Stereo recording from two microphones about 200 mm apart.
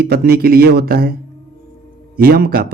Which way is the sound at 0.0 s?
50° right (ahead or behind).